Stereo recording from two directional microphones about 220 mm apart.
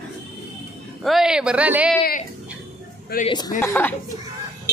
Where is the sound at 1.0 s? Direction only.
Centre (ahead or behind).